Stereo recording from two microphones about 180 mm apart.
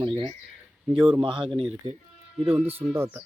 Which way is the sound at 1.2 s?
25° right (ahead or behind).